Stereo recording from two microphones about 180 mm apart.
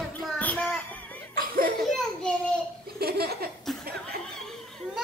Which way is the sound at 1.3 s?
50° right (ahead or behind).